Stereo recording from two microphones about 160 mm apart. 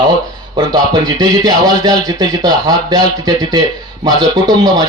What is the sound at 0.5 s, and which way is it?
Speech, 25° right (ahead or behind).